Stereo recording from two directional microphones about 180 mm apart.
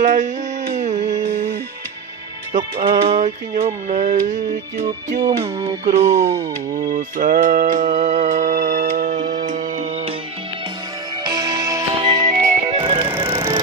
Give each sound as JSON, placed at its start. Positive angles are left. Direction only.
{"t": 0.0, "sound": "speech", "side_deg": -45}
{"t": 0.7, "sound": "a sound", "side_deg": -40}
{"t": 3.1, "sound": "speech", "side_deg": -45}
{"t": 5.2, "sound": "speech", "side_deg": -30}
{"t": 11.3, "sound": "music", "side_deg": -20}
{"t": 12.3, "sound": "music", "side_deg": -30}
{"t": 13.1, "sound": "music", "side_deg": -10}